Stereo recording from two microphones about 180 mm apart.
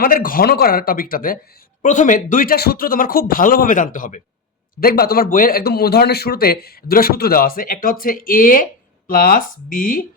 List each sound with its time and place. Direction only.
0.0 s speech: 50° left (ahead or behind)
4.8 s a man's voice: 55° left (ahead or behind)